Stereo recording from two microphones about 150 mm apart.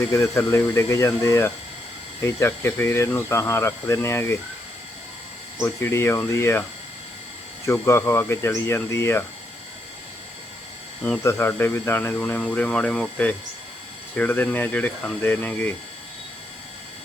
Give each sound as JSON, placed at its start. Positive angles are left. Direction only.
{"t": 0.1, "sound": "speech", "side_deg": 20}
{"t": 5.5, "sound": "speech", "side_deg": 15}
{"t": 11.2, "sound": "speech", "side_deg": 15}